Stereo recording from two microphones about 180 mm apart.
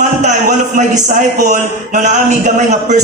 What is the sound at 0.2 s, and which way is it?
A man's voice, 45° right (ahead or behind).